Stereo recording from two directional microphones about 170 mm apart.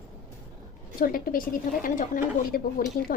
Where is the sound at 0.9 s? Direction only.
55° left (ahead or behind).